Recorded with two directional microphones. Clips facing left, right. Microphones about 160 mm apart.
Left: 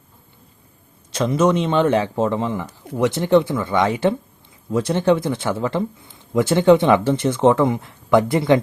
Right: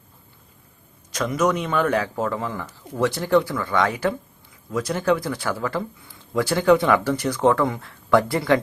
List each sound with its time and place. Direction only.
1.1 s speech: 30° left (ahead or behind)